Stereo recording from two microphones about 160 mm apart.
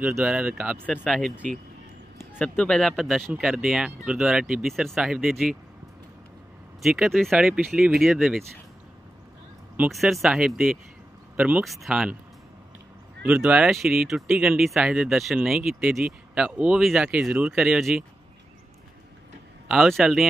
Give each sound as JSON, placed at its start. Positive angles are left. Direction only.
{"t": 0.0, "sound": "speech", "side_deg": -5}
{"t": 2.1, "sound": "speech", "side_deg": 10}
{"t": 6.8, "sound": "speech", "side_deg": 0}
{"t": 9.8, "sound": "speech", "side_deg": 0}
{"t": 13.3, "sound": "speech", "side_deg": -5}
{"t": 19.7, "sound": "speech", "side_deg": 0}